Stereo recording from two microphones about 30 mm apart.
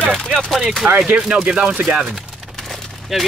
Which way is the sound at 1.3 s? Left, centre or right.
Right.